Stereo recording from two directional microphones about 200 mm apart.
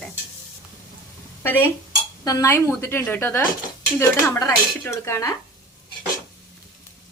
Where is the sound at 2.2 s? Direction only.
15° left (ahead or behind).